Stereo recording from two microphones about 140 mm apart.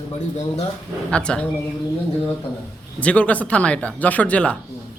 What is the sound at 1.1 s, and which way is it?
Speech, 5° left (ahead or behind).